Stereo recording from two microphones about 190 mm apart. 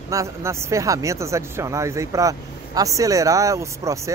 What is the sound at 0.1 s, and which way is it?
Speech, 15° right (ahead or behind).